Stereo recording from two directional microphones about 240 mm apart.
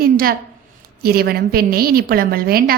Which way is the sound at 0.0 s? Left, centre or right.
Right.